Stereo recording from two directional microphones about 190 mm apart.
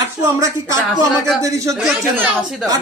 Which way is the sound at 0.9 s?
20° left (ahead or behind).